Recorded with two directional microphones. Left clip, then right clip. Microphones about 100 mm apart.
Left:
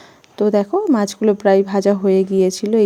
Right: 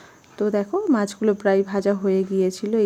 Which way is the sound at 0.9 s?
25° left (ahead or behind).